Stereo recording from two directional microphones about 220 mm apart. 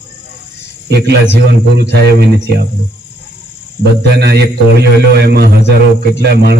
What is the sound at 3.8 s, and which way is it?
A man's voice, 50° right (ahead or behind).